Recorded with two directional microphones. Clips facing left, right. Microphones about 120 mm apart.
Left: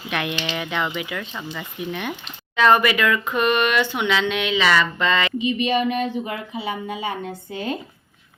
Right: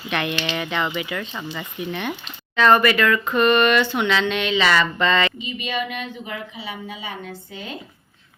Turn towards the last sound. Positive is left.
turn(degrees=45)  # may be behind; listen again after turning